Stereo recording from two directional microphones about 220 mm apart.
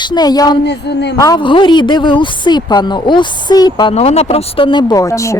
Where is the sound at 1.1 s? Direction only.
15° left (ahead or behind).